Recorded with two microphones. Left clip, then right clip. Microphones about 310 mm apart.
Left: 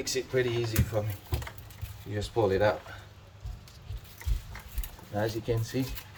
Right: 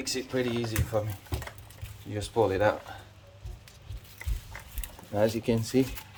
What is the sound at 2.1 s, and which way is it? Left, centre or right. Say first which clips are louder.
Speech: right 1 dB; right.